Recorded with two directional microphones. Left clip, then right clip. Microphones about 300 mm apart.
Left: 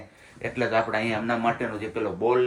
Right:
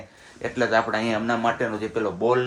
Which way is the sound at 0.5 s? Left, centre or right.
Centre.